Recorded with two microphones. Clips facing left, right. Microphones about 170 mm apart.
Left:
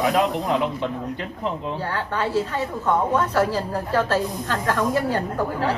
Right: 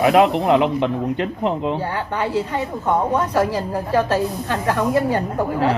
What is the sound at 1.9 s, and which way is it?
A woman's voice, 15° right (ahead or behind).